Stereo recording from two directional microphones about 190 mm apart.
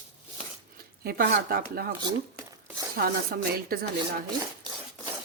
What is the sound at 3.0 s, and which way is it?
Speech, 55° right (ahead or behind).